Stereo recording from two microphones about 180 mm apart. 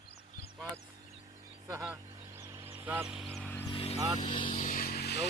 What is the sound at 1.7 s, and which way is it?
Vehicle, 15° right (ahead or behind).